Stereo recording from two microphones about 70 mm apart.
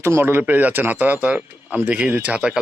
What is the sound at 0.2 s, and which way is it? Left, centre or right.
Speech, right.